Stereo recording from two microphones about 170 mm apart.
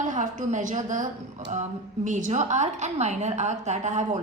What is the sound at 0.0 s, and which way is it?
A woman's voice, 45° right (ahead or behind).